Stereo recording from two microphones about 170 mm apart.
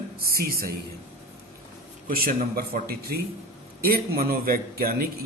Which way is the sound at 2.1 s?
60° right (ahead or behind).